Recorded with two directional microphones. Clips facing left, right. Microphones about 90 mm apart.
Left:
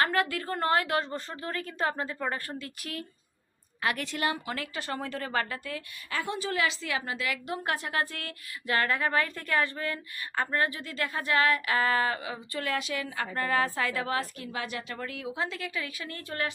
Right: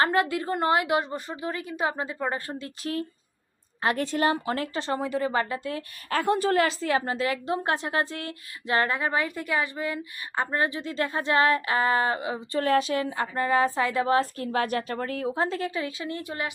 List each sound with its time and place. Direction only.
0.0 s a woman's voice: 20° right (ahead or behind)
6.1 s a woman's voice: 50° right (ahead or behind); by 12.6 s 25° right (ahead or behind)
12.6 s a woman's voice: 35° right (ahead or behind); by 16.5 s 20° right (ahead or behind)